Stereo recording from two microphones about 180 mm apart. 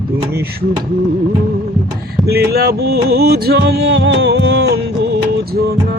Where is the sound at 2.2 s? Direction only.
60° right (ahead or behind).